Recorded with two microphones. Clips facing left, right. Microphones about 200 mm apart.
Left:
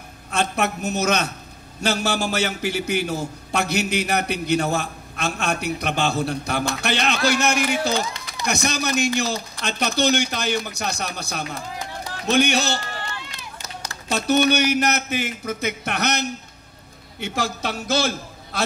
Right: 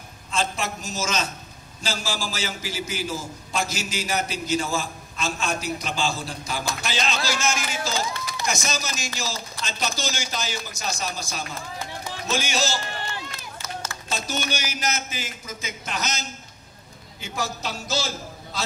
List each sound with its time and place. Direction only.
0.3 s a man's voice: 65° left (ahead or behind)
14.1 s a man's voice: 65° left (ahead or behind)